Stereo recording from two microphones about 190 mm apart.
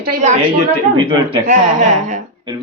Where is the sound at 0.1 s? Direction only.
40° right (ahead or behind).